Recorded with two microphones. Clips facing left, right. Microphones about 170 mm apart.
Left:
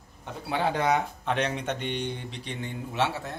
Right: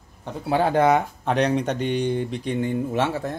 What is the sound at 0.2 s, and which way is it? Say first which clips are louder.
Speech: right 6 dB; 40° right (ahead or behind).